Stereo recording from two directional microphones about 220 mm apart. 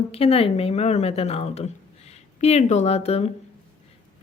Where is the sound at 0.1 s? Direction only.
25° left (ahead or behind).